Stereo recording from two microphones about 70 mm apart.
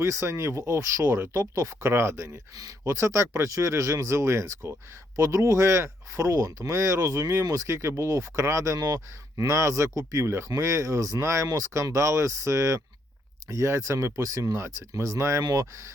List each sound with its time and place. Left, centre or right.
0.0 s speech: right
2.6 s speech: right